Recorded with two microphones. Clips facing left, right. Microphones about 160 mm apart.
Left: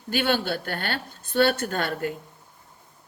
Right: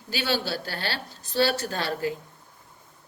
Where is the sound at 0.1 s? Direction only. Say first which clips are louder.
Left 3 dB; 50° left (ahead or behind).